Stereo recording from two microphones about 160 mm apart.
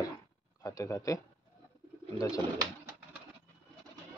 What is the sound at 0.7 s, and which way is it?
A man's voice, 20° left (ahead or behind).